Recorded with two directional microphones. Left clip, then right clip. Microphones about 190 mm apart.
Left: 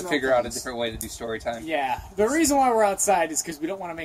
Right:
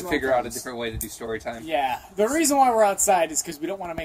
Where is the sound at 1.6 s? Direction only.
15° right (ahead or behind).